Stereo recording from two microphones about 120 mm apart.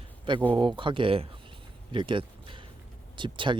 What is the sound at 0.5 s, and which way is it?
Speech, 40° right (ahead or behind).